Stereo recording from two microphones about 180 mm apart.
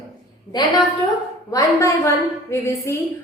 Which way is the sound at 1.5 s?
20° left (ahead or behind).